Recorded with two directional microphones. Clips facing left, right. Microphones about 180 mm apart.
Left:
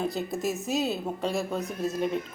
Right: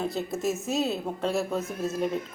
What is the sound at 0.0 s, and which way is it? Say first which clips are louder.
A woman's voice: even; centre (ahead or behind).